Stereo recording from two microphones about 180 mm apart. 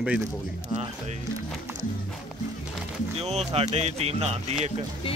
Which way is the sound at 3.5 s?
35° right (ahead or behind).